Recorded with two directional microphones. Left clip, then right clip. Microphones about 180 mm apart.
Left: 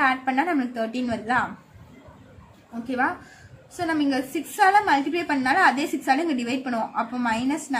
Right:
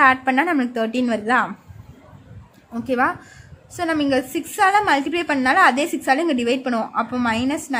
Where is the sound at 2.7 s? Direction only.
55° right (ahead or behind).